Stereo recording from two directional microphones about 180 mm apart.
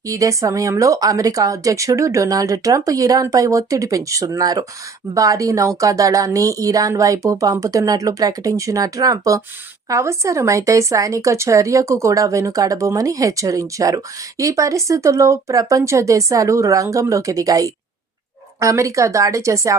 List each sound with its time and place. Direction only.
0.0 s speech: 20° right (ahead or behind)